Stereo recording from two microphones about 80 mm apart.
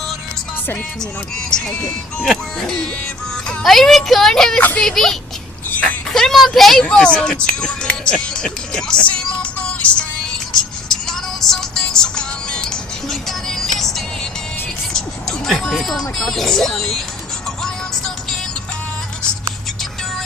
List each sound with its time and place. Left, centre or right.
1.5 s speech: centre
5.7 s a sound: centre
6.1 s speech: centre
6.8 s music: centre